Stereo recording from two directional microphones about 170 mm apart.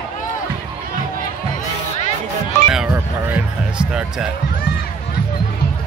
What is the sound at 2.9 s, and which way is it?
Basketball bounce, 5° right (ahead or behind).